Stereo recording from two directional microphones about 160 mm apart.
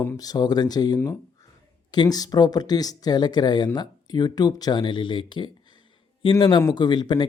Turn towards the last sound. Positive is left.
turn(degrees=25)  # may be behind; listen again after turning